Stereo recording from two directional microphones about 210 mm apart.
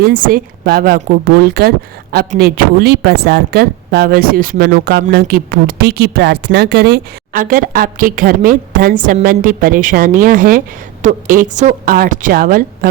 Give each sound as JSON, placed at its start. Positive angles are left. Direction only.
{"t": 0.0, "sound": "a woman's voice", "side_deg": -45}